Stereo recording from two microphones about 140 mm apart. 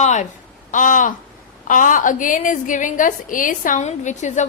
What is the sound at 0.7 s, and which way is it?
A woman's voice, 70° left (ahead or behind).